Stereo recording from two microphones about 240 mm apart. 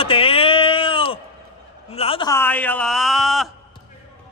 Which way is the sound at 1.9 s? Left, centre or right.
Left.